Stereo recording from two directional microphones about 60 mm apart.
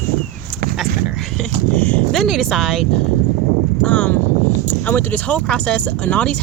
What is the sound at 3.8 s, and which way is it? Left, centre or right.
Speech, left.